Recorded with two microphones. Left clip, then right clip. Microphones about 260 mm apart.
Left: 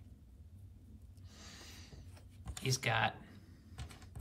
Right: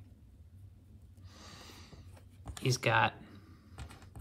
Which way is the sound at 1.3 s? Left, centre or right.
Centre.